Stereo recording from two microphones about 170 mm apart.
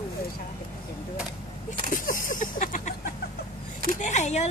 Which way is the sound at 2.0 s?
50° left (ahead or behind).